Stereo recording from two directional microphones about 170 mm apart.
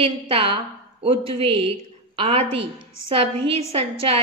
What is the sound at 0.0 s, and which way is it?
A woman's voice, 35° right (ahead or behind).